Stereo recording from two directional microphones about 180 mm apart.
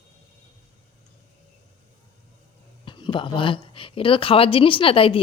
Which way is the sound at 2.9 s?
25° left (ahead or behind).